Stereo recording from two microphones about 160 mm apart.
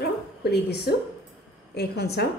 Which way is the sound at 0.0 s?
90° left.